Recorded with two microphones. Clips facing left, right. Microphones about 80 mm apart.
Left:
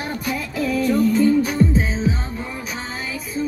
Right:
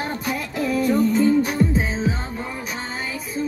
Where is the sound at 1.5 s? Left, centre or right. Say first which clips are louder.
Left 2 dB; centre.